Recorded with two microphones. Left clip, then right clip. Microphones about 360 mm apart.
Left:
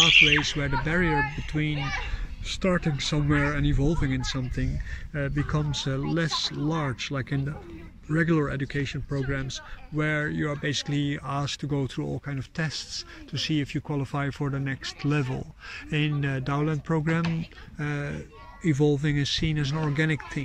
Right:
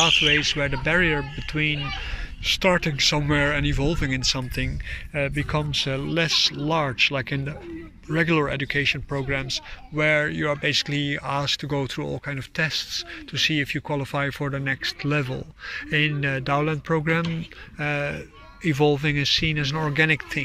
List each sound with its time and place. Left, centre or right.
0.4 s speech: centre